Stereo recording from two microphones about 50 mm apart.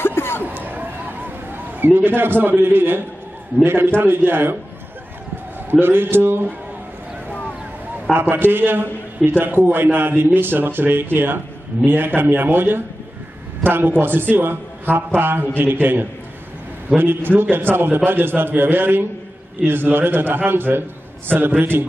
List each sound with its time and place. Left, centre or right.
0.0 s chatter: left
0.4 s chatter: right
1.9 s speech: right
5.7 s speech: right
8.2 s a man's voice: right